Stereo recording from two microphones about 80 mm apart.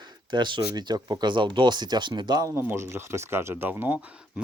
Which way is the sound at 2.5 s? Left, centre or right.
Right.